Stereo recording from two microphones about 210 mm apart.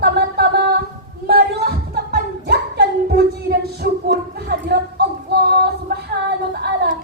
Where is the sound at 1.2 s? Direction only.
45° right (ahead or behind).